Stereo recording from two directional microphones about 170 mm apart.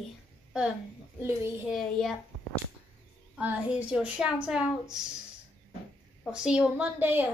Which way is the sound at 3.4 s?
10° right (ahead or behind).